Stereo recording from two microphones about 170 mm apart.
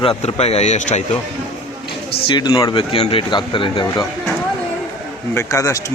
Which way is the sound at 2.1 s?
25° left (ahead or behind).